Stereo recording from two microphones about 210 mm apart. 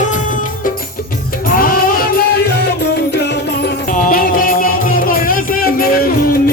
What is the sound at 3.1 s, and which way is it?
Music, 50° left (ahead or behind).